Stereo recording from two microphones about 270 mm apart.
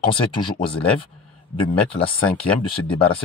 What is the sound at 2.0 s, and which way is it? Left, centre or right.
Speech, centre.